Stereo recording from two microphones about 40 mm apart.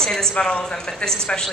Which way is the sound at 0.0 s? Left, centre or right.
Centre.